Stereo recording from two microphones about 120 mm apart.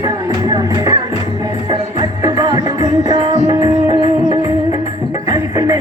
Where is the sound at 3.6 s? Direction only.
35° right (ahead or behind).